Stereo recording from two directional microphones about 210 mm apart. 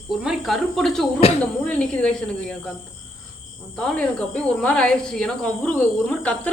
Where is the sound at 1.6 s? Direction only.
5° left (ahead or behind).